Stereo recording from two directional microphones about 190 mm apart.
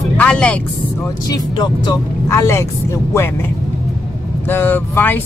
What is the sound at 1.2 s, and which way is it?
Speech, 20° left (ahead or behind).